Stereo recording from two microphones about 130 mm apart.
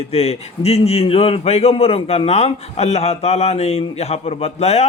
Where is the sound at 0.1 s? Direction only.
50° left (ahead or behind).